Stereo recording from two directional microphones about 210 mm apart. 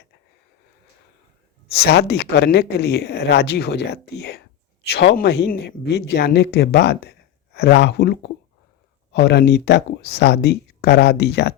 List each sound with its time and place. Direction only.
1.7 s speech: 50° left (ahead or behind)